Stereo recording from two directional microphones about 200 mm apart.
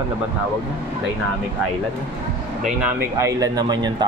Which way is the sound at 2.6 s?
10° right (ahead or behind).